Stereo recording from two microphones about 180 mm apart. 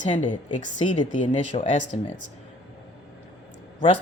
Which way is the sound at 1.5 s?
35° left (ahead or behind).